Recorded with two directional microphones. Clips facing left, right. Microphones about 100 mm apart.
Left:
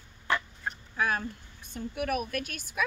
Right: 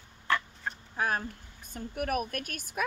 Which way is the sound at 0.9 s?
40° right (ahead or behind).